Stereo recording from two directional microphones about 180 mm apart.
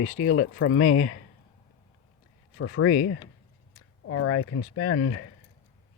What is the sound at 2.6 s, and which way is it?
Speech, 90° left.